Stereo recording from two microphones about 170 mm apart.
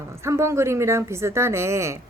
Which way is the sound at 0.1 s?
15° right (ahead or behind).